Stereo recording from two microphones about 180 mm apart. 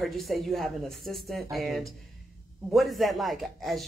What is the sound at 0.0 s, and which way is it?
Speech, centre (ahead or behind).